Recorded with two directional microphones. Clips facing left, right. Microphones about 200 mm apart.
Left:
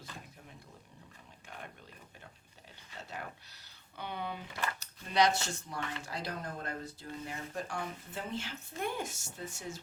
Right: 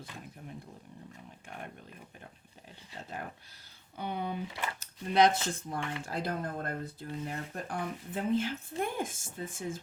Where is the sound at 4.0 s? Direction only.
45° right (ahead or behind).